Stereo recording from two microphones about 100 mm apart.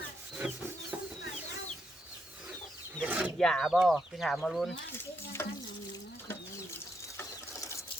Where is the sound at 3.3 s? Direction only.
5° left (ahead or behind).